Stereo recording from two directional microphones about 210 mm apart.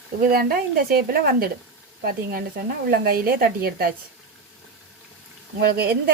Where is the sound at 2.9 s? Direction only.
45° right (ahead or behind).